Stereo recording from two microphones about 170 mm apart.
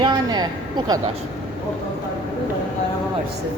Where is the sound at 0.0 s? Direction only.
25° right (ahead or behind).